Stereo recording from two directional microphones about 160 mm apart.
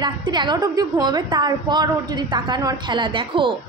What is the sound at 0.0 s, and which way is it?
A woman's voice, 25° right (ahead or behind).